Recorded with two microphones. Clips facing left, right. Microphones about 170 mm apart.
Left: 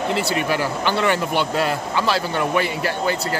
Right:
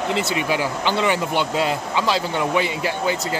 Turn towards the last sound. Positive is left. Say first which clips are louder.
# even
turn(degrees=-15)  # may be behind; listen again after turning